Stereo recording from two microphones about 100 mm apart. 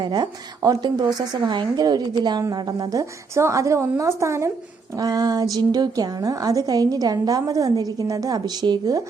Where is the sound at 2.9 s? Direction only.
30° right (ahead or behind).